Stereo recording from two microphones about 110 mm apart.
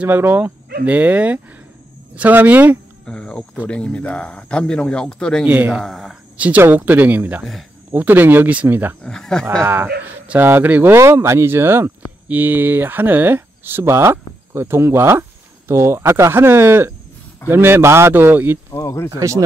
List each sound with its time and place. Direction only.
0.0 s speech: 20° right (ahead or behind)
3.1 s speech: 10° left (ahead or behind)
5.4 s speech: 10° right (ahead or behind)
5.8 s speech: centre (ahead or behind)
6.3 s speech: 15° right (ahead or behind)
9.0 s speech: 5° left (ahead or behind)
9.6 s speech: 20° right (ahead or behind)
18.7 s speech: 30° left (ahead or behind)
19.0 s speech: 30° right (ahead or behind)